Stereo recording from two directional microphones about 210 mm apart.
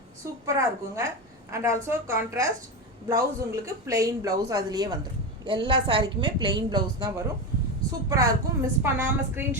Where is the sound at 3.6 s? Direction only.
15° right (ahead or behind).